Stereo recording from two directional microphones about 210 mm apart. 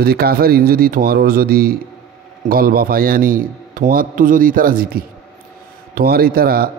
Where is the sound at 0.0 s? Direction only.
50° right (ahead or behind).